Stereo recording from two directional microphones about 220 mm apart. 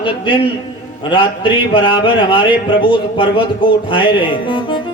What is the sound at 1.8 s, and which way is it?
Speech, 20° left (ahead or behind).